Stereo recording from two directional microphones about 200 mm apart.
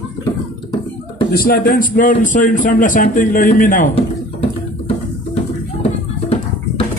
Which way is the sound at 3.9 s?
30° left (ahead or behind).